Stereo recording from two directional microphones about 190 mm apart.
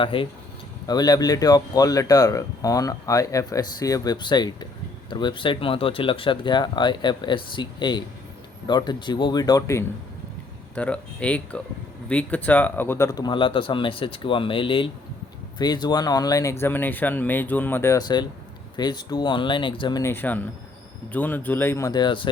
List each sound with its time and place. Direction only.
0.0 s speech: 25° left (ahead or behind)
20.0 s speech: 10° left (ahead or behind)